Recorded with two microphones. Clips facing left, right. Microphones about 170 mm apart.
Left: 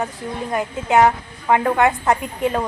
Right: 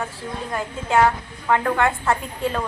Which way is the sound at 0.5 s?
20° left (ahead or behind).